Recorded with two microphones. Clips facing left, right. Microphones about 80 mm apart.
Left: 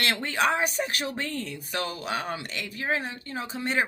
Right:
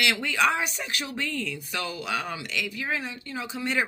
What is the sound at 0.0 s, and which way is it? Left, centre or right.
Speech, left.